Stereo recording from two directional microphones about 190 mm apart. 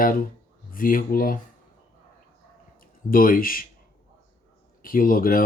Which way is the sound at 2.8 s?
45° left (ahead or behind).